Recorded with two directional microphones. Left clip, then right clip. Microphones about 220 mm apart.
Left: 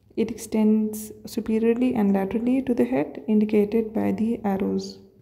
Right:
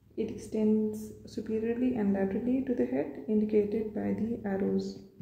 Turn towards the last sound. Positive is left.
turn(degrees=30)  # may be behind; listen again after turning